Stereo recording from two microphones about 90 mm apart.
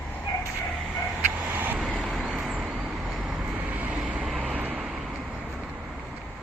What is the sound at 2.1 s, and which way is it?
Vehicle, centre (ahead or behind).